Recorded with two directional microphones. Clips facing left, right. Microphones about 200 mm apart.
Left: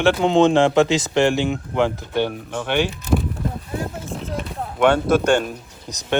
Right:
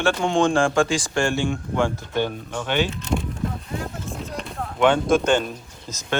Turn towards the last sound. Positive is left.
turn(degrees=15)  # may be behind; listen again after turning